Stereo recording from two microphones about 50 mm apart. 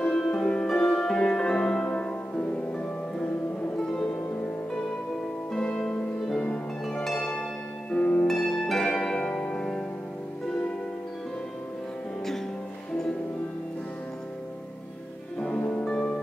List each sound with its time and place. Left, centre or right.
0.0 s music: centre
5.5 s music: centre
6.9 s harp: centre
7.2 s music: left
7.9 s harp: left
8.4 s harp: centre
15.8 s music: centre